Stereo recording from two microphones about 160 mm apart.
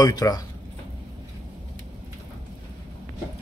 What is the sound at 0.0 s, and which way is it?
Speech, 25° left (ahead or behind).